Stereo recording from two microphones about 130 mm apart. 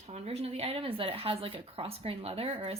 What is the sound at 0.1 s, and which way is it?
A woman's voice, 50° right (ahead or behind).